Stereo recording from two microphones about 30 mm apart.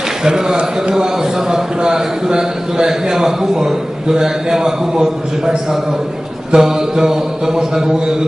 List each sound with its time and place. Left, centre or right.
0.3 s a man's voice: right
6.5 s a man's voice: right